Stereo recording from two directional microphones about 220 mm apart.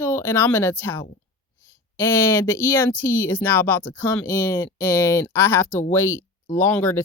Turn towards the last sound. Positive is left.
turn(degrees=10)  # may be behind; listen again after turning